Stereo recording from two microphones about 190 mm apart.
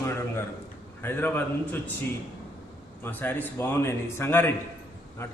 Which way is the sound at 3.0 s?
10° left (ahead or behind).